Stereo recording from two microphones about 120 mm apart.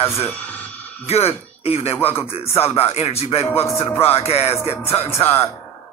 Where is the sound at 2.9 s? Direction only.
60° left (ahead or behind).